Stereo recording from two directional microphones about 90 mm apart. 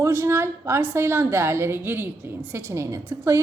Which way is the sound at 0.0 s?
30° right (ahead or behind).